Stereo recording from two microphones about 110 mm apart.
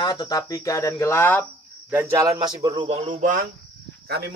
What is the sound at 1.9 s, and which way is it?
Cricket, 20° right (ahead or behind).